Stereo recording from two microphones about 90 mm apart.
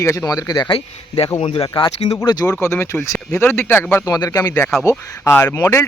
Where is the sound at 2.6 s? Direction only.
30° left (ahead or behind).